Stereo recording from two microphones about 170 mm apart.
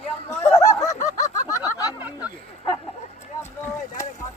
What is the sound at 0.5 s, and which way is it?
Snicker, 20° left (ahead or behind).